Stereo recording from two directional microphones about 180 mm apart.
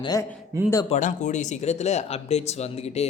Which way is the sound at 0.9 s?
40° left (ahead or behind).